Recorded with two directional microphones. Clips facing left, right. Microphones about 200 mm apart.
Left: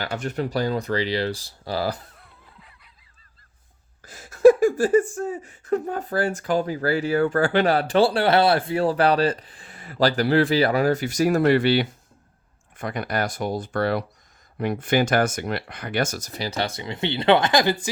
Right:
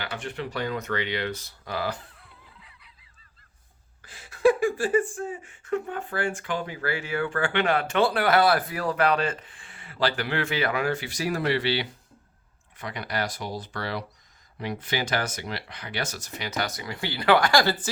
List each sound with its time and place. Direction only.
0.0 s speech: 40° left (ahead or behind)
4.0 s speech: 45° left (ahead or behind); by 17.7 s 20° left (ahead or behind)